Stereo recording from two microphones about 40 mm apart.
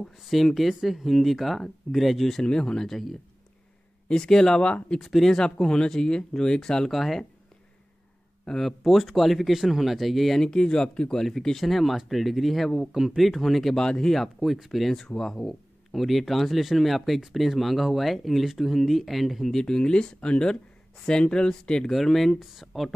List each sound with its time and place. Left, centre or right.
0.2 s speech: centre
2.4 s speech: left
2.9 s speech: centre
6.9 s speech: centre
8.6 s speech: centre
10.5 s speech: centre
13.7 s speech: centre
14.1 s speech: centre
15.1 s speech: centre
15.9 s speech: centre
19.6 s speech: left
21.8 s speech: centre